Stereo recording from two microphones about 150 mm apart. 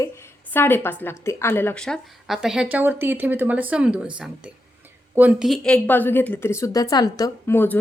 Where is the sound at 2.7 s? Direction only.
15° right (ahead or behind).